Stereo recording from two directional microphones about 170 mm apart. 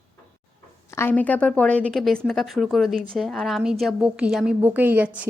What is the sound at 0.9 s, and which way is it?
A woman's voice, 10° left (ahead or behind).